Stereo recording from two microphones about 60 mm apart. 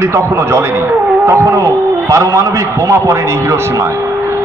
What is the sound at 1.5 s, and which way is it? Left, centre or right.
Speech, right.